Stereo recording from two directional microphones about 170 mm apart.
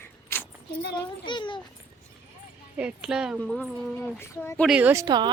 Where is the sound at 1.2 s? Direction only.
30° left (ahead or behind).